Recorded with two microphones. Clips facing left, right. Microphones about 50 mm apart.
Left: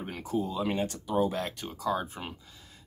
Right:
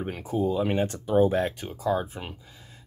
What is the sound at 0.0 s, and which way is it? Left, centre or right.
Speech, centre.